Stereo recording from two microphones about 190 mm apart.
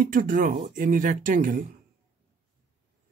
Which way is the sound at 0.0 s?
45° right (ahead or behind).